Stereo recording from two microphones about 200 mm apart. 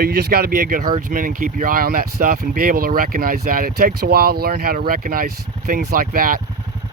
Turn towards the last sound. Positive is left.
turn(degrees=-45)  # may be behind; listen again after turning